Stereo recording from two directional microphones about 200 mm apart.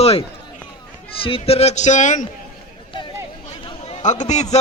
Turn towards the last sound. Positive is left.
turn(degrees=35)  # may be behind; listen again after turning